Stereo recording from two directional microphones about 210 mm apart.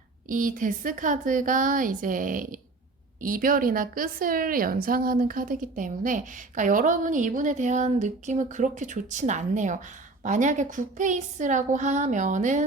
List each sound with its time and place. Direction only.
0.3 s a woman's voice: 40° right (ahead or behind)